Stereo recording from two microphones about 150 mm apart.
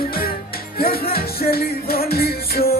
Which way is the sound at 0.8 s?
85° left.